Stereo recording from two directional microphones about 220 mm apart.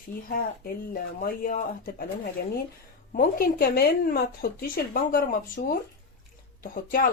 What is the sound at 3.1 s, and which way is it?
Speech, 40° left (ahead or behind).